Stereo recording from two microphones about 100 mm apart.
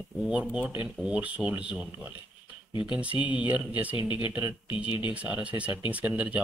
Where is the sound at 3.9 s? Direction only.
55° left (ahead or behind).